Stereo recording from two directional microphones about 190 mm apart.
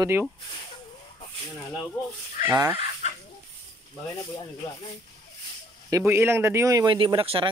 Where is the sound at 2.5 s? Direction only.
15° right (ahead or behind).